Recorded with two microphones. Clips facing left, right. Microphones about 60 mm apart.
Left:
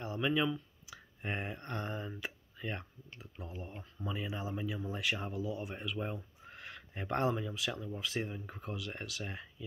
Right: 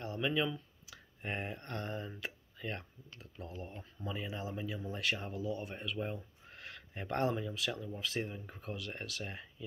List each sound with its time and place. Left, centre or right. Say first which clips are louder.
0.0 s speech: left 2 dB; centre
2.8 s speech: left 2 dB; centre
4.0 s speech: left 1 dB; centre